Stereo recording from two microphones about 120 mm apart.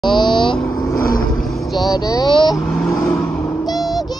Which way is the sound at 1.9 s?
30° left (ahead or behind).